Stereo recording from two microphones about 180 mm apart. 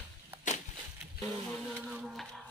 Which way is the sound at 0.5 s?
40° left (ahead or behind).